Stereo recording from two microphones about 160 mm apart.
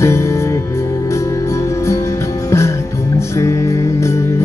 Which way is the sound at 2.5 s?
15° left (ahead or behind).